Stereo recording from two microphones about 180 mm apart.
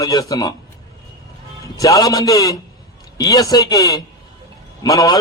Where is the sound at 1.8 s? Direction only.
20° left (ahead or behind).